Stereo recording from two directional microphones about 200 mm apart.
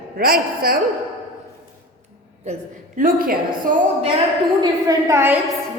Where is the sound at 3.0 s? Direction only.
45° right (ahead or behind).